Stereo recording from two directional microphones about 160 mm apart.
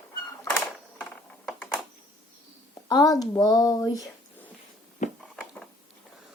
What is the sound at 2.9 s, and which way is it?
Speech, 25° left (ahead or behind).